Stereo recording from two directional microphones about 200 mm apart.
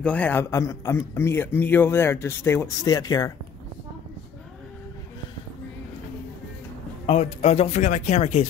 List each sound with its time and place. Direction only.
0.0 s a man's voice: 5° left (ahead or behind)
7.1 s speech: 35° left (ahead or behind)